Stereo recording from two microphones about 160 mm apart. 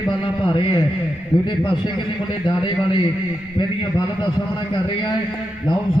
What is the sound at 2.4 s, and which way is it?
Speech, 30° left (ahead or behind).